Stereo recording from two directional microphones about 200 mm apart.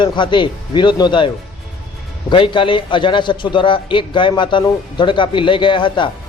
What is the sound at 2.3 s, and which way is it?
A man's voice, 25° left (ahead or behind).